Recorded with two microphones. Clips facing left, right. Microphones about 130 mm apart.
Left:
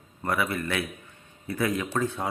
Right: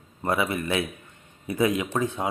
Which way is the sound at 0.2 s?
20° right (ahead or behind).